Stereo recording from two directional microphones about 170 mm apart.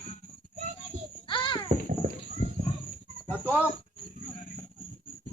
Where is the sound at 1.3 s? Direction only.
30° left (ahead or behind).